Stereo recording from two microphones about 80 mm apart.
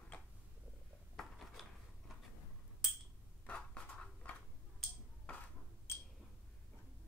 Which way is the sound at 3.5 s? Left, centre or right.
Centre.